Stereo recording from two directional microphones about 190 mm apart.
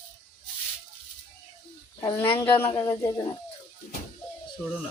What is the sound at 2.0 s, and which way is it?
Speech, 10° left (ahead or behind).